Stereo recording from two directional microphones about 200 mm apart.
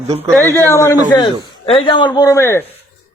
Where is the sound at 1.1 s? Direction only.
25° left (ahead or behind).